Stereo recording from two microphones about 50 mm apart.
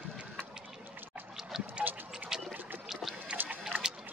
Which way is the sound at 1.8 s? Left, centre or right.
Centre.